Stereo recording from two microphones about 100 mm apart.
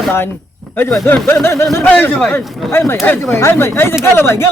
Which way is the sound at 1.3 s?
25° left (ahead or behind).